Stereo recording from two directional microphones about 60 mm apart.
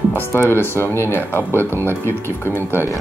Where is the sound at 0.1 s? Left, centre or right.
Left.